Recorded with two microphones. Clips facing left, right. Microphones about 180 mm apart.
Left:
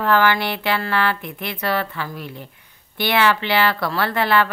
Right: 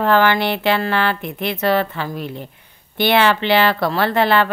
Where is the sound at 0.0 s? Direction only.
25° right (ahead or behind).